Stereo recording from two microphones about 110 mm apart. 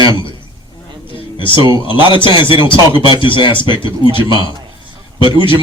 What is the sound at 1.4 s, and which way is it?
A man's voice, 50° left (ahead or behind).